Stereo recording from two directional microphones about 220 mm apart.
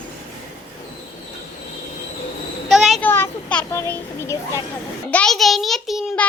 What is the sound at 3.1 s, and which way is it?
A child's voice, 10° left (ahead or behind).